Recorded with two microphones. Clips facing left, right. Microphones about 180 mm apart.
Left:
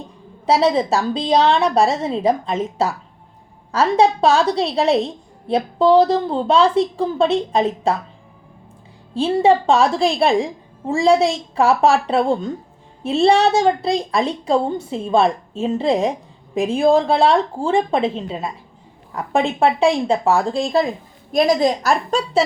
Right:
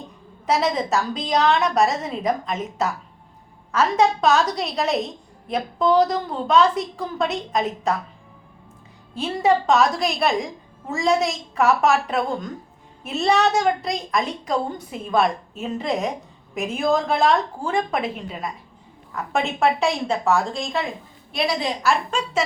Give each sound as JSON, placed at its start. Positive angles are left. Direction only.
{"t": 0.4, "sound": "a woman's voice", "side_deg": 30}
{"t": 9.1, "sound": "a woman's voice", "side_deg": 30}